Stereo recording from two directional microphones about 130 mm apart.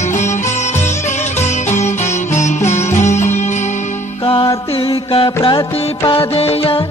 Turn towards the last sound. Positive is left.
turn(degrees=45)  # may be behind; listen again after turning